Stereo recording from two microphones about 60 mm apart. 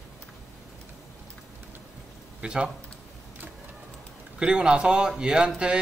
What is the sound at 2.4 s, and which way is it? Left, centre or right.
Speech, centre.